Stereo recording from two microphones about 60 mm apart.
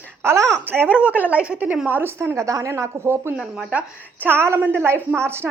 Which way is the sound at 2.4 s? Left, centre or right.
Right.